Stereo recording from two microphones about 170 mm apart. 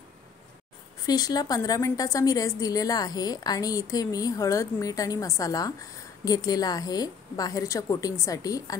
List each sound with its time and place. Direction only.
1.0 s a woman's voice: 20° left (ahead or behind)